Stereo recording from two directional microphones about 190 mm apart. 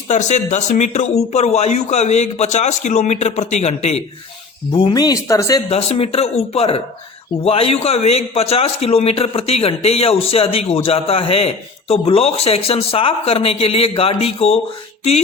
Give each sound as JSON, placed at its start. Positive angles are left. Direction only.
{"t": 0.1, "sound": "a man's voice", "side_deg": 40}
{"t": 4.7, "sound": "a man's voice", "side_deg": 25}